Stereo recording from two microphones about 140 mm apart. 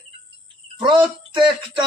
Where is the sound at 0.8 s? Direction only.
35° right (ahead or behind).